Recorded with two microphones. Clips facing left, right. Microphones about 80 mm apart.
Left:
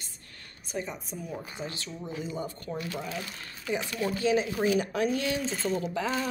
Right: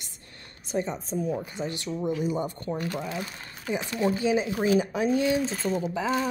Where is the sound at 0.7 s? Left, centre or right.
Right.